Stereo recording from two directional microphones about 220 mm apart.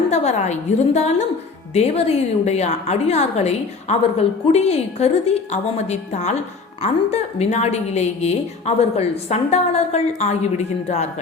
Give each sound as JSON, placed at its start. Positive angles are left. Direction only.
{"t": 0.1, "sound": "a woman's voice", "side_deg": 30}